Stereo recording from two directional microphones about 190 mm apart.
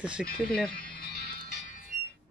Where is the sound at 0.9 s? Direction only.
55° left (ahead or behind).